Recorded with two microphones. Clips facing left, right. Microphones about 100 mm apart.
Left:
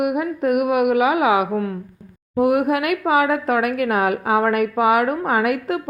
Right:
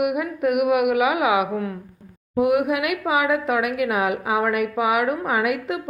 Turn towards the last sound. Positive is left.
turn(degrees=40)  # may be behind; listen again after turning